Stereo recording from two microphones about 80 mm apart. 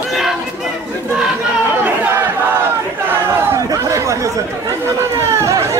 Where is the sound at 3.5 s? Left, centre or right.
Right.